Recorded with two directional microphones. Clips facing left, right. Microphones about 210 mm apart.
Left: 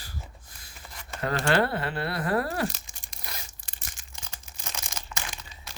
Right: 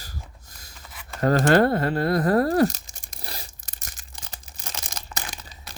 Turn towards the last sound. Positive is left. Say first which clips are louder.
# right 2 dB
turn(degrees=-35)  # may be behind; listen again after turning